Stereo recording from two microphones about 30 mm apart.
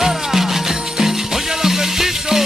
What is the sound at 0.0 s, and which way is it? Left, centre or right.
Music, centre.